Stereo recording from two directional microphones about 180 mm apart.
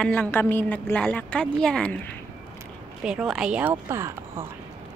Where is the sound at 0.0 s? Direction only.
5° left (ahead or behind); by 4.5 s 15° right (ahead or behind).